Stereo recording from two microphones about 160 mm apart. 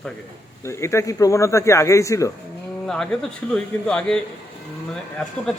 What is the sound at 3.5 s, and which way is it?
Speech, 5° left (ahead or behind).